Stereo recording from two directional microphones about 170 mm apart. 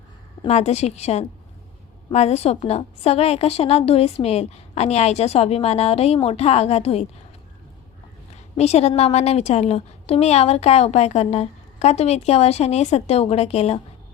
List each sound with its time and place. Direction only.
0.4 s a woman's voice: 40° left (ahead or behind)
8.5 s a woman's voice: 40° left (ahead or behind)